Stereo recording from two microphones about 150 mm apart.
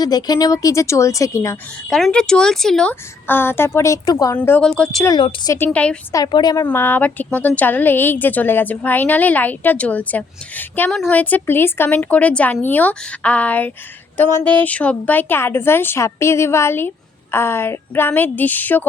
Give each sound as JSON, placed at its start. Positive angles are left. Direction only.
{"t": 0.0, "sound": "speech", "side_deg": 25}
{"t": 1.9, "sound": "speech", "side_deg": 0}
{"t": 2.9, "sound": "a woman's voice", "side_deg": 15}
{"t": 4.4, "sound": "a woman's voice", "side_deg": 10}
{"t": 5.0, "sound": "speech", "side_deg": 30}
{"t": 5.5, "sound": "a woman's voice", "side_deg": 10}
{"t": 6.1, "sound": "speech", "side_deg": 30}
{"t": 6.6, "sound": "a woman's voice", "side_deg": 15}